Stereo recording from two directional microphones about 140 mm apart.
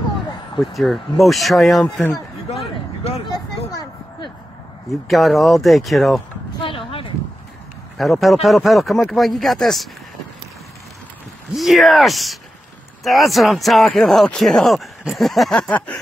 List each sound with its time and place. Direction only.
0.6 s speech: centre (ahead or behind)
2.5 s vehicle: 45° left (ahead or behind)
5.0 s speech: centre (ahead or behind)
6.6 s a sound: 40° left (ahead or behind)
8.0 s speech: centre (ahead or behind)
11.5 s speech: centre (ahead or behind)